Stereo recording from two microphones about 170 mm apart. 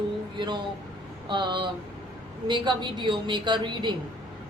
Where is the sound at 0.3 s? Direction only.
25° right (ahead or behind).